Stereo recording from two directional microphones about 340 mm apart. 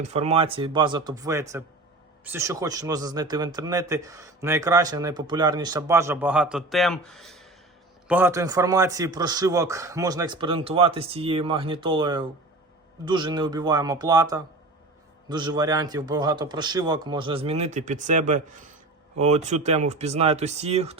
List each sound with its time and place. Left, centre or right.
0.0 s a man's voice: centre